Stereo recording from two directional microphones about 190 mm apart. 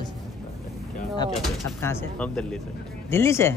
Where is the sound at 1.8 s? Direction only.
10° left (ahead or behind).